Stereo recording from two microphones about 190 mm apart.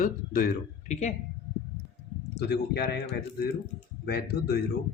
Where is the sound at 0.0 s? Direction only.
45° left (ahead or behind).